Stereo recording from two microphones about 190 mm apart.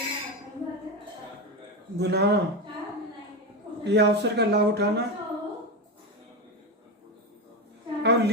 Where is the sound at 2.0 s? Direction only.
60° right (ahead or behind).